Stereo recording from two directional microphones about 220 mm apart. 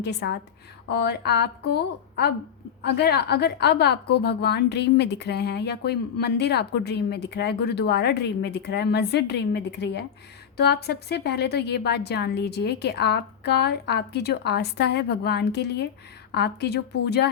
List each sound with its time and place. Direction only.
0.0 s a woman's voice: 50° left (ahead or behind)